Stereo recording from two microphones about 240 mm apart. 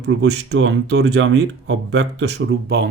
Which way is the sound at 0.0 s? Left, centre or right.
Right.